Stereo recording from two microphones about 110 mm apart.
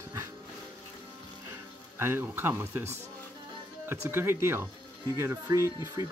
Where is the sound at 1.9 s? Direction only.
20° right (ahead or behind).